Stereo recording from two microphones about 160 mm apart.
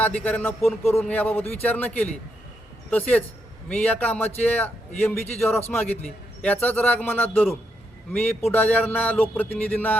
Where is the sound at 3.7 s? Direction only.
10° left (ahead or behind).